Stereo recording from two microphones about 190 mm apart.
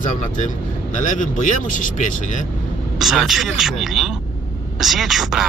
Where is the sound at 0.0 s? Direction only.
40° left (ahead or behind).